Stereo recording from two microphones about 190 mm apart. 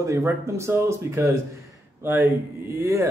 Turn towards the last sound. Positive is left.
turn(degrees=-15)  # may be behind; listen again after turning